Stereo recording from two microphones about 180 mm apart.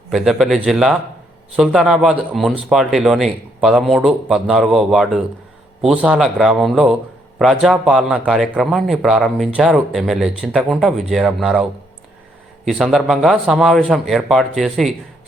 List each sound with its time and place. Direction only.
0.1 s speech: centre (ahead or behind)